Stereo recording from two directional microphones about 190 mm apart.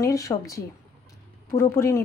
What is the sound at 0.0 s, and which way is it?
Speech, 15° left (ahead or behind).